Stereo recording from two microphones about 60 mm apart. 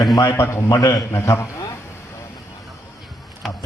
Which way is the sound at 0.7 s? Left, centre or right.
Left.